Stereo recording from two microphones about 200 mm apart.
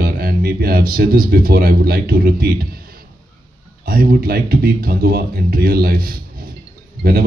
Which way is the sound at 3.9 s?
45° right (ahead or behind).